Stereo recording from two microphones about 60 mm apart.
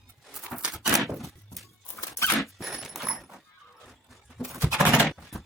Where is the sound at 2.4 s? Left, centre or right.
Centre.